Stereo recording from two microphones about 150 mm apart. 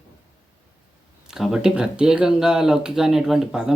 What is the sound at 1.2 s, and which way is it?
Speech, 5° right (ahead or behind).